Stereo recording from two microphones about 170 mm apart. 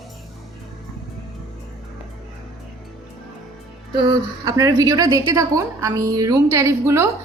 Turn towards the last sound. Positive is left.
turn(degrees=-15)  # may be behind; listen again after turning